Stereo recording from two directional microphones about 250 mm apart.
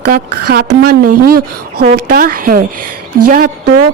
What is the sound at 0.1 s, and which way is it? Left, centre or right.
Speech, right.